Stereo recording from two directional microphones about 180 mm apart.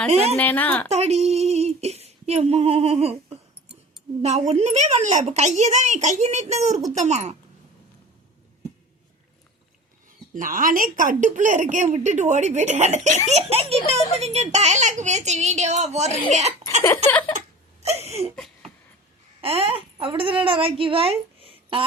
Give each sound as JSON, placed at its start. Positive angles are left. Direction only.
{"t": 0.1, "sound": "a woman's voice", "side_deg": -35}
{"t": 0.3, "sound": "speech", "side_deg": 10}
{"t": 0.9, "sound": "female singing", "side_deg": -35}
{"t": 4.2, "sound": "a woman's voice", "side_deg": -40}
{"t": 10.3, "sound": "a woman's voice", "side_deg": -50}
{"t": 17.1, "sound": "speech", "side_deg": 10}
{"t": 17.8, "sound": "a sound", "side_deg": -35}
{"t": 19.4, "sound": "speech", "side_deg": -30}